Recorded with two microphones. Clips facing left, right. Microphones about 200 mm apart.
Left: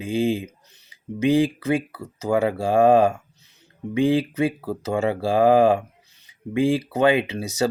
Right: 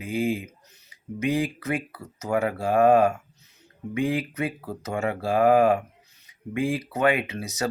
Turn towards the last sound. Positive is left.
turn(degrees=30)  # may be behind; listen again after turning